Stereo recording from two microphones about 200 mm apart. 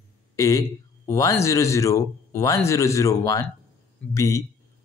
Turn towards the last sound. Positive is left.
turn(degrees=15)  # may be behind; listen again after turning